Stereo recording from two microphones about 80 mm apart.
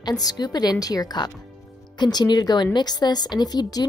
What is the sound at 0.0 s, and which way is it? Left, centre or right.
A woman's voice, left.